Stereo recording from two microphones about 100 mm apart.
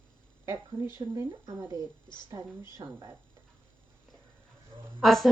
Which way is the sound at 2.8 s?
65° right (ahead or behind).